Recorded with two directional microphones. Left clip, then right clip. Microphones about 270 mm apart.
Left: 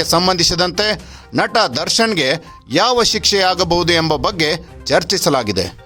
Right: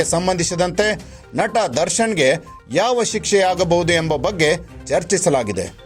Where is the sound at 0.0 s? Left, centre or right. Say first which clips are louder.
Left 5 dB; centre.